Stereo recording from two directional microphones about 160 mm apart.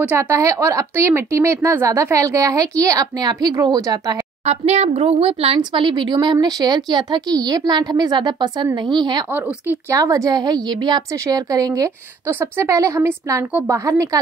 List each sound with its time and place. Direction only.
0.0 s a woman's voice: 15° right (ahead or behind)
4.5 s a woman's voice: 40° right (ahead or behind)
9.3 s a woman's voice: 15° right (ahead or behind)